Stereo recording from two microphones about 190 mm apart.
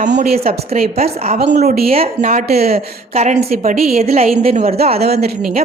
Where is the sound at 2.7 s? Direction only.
35° right (ahead or behind).